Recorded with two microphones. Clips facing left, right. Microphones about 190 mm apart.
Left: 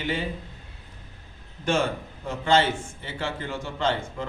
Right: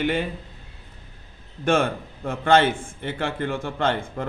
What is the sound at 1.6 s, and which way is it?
A man's voice, 55° right (ahead or behind).